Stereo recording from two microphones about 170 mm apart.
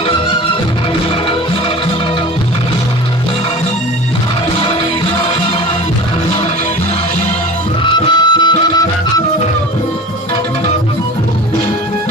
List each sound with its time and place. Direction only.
7.9 s music: 25° left (ahead or behind)